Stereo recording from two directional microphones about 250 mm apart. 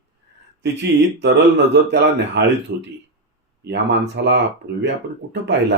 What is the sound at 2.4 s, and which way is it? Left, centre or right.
Speech, right.